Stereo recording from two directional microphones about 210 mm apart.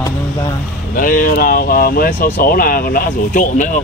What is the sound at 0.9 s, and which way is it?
Speech, 40° left (ahead or behind).